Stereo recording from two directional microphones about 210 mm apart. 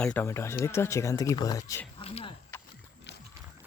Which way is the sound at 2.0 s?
30° left (ahead or behind).